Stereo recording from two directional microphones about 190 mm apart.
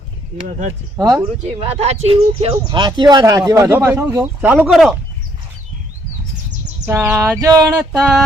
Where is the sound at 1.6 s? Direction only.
30° right (ahead or behind); by 4.9 s centre (ahead or behind).